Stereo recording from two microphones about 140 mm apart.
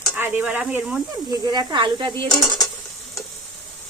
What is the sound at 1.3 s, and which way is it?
Speech, 30° right (ahead or behind).